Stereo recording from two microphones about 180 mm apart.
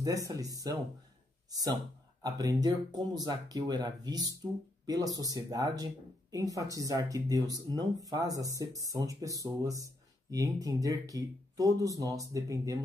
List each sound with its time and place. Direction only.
0.0 s speech: 20° right (ahead or behind)